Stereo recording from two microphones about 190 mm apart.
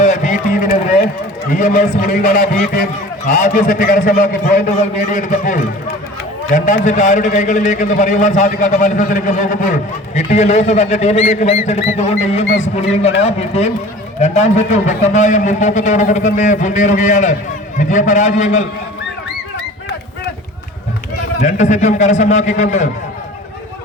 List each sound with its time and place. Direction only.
0.0 s a man's voice: 40° left (ahead or behind)
21.4 s a man's voice: 40° left (ahead or behind)